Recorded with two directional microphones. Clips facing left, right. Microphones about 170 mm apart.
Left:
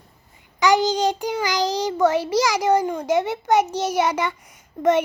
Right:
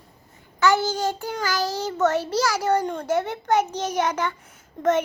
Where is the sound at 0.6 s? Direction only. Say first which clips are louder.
Left 3 dB; 15° left (ahead or behind).